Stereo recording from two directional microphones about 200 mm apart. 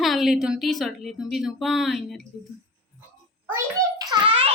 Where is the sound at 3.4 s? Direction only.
15° right (ahead or behind).